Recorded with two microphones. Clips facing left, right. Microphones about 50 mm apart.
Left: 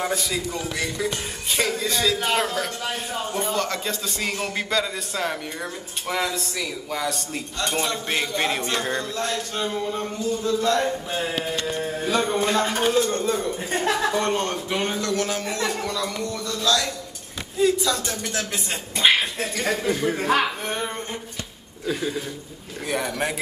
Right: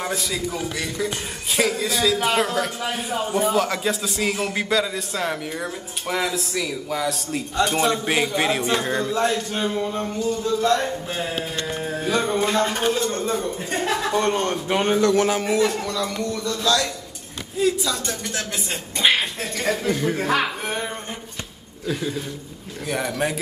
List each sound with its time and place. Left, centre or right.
0.0 s a man's voice: centre
9.1 s a sound: centre
11.9 s a man's voice: centre
14.8 s music: right
15.5 s a man's voice: centre